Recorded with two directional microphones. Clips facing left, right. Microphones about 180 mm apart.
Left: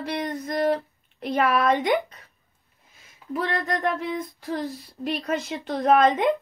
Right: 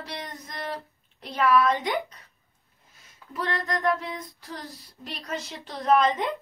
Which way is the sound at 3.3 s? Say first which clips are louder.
Left 3 dB; 60° left (ahead or behind).